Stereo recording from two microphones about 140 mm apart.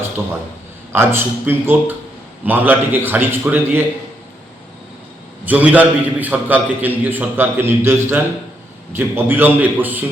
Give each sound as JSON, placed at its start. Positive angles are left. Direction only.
{"t": 0.9, "sound": "a man's voice", "side_deg": -15}
{"t": 5.5, "sound": "a man's voice", "side_deg": -10}